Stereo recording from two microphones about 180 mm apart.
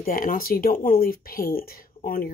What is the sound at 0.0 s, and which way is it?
Speech, 55° left (ahead or behind).